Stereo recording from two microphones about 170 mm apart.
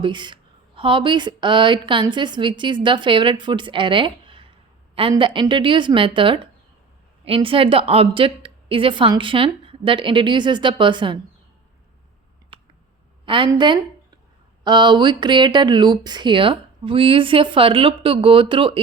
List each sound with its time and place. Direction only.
0.0 s a woman's voice: 25° right (ahead or behind)
13.2 s a woman's voice: 30° right (ahead or behind)